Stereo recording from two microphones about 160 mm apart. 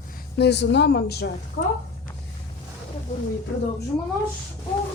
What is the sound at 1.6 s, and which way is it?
Speech, 70° left (ahead or behind).